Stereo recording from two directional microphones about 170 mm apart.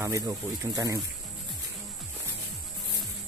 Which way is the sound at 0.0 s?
20° right (ahead or behind).